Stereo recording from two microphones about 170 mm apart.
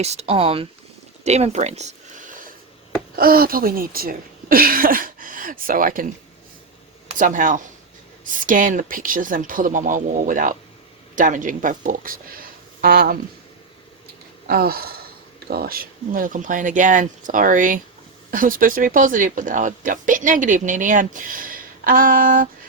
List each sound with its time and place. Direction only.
0.0 s speech: 40° right (ahead or behind)
1.2 s a sound: 40° right (ahead or behind)
3.2 s speech: 60° right (ahead or behind)
7.2 s speech: 50° right (ahead or behind)
14.4 s speech: 60° right (ahead or behind)